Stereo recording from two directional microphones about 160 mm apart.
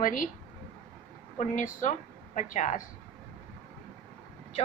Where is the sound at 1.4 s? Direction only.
50° left (ahead or behind).